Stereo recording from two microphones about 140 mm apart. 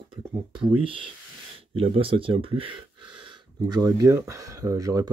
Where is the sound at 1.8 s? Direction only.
40° right (ahead or behind).